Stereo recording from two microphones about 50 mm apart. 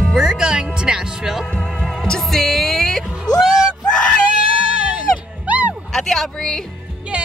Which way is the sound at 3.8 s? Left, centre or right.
Centre.